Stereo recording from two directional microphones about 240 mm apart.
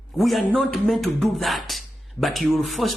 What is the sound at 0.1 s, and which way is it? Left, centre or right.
A man's voice, centre.